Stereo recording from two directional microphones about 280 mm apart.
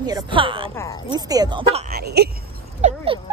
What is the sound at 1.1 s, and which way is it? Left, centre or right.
Speech, centre.